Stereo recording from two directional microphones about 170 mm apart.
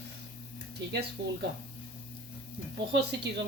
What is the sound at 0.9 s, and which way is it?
Speech, 75° right (ahead or behind).